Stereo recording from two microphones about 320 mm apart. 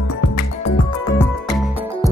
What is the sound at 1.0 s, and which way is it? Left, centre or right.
Music, centre.